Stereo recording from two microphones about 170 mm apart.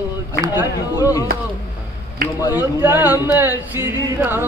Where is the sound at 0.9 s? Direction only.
20° left (ahead or behind).